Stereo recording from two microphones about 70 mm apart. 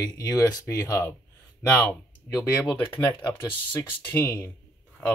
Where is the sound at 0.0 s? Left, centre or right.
Left.